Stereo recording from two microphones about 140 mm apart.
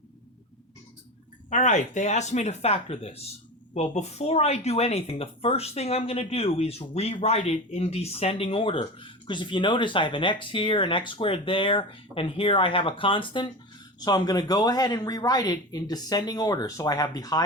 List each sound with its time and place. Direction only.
1.5 s speech: 60° left (ahead or behind); by 17.4 s 25° left (ahead or behind)